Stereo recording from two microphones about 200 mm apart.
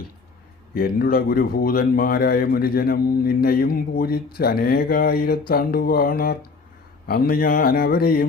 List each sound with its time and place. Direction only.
0.7 s a man's voice: 50° left (ahead or behind)